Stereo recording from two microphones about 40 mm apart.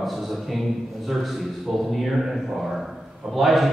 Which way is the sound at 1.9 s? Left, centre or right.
Centre.